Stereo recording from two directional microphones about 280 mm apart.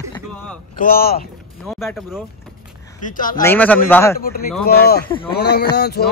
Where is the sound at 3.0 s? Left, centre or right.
Left.